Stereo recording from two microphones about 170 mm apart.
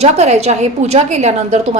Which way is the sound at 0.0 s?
40° right (ahead or behind).